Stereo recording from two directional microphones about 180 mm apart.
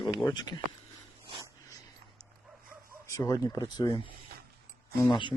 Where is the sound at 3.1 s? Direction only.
20° left (ahead or behind).